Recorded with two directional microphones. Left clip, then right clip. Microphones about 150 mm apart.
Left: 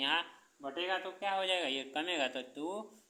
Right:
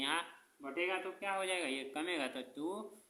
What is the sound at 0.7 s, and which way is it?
Speech, 50° left (ahead or behind).